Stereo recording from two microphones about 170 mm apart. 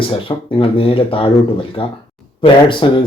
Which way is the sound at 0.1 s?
30° left (ahead or behind).